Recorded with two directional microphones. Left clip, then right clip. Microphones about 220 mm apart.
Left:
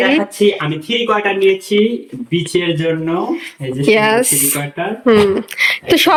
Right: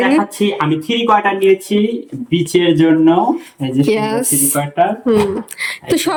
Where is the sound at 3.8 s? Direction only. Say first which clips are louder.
Left 8 dB; 5° right (ahead or behind).